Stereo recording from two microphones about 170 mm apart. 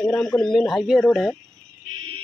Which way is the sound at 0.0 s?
5° left (ahead or behind).